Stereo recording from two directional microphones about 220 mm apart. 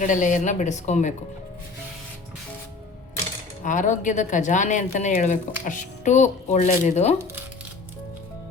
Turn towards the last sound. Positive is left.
turn(degrees=30)  # may be behind; listen again after turning